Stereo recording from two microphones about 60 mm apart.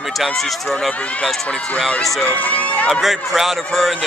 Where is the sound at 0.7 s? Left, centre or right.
Centre.